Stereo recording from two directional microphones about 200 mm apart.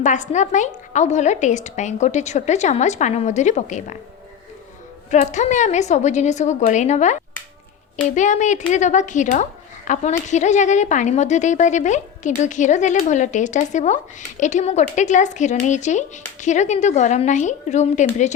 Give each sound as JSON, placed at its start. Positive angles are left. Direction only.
{"t": 0.0, "sound": "speech", "side_deg": 40}
{"t": 5.1, "sound": "speech", "side_deg": 35}